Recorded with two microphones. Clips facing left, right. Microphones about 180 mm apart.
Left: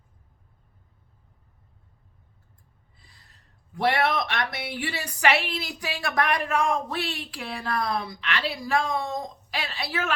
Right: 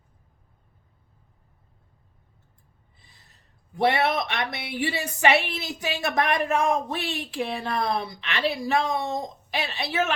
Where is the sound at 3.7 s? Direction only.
20° right (ahead or behind).